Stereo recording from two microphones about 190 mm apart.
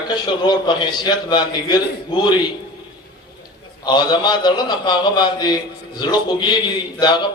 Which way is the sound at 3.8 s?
25° left (ahead or behind).